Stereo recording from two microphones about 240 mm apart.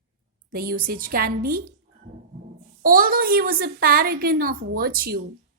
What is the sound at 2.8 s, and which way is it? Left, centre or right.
A woman's voice, right.